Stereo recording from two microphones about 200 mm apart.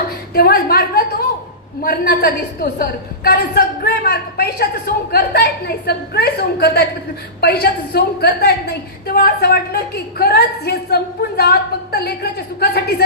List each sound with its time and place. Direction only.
0.3 s a woman's voice: 50° left (ahead or behind)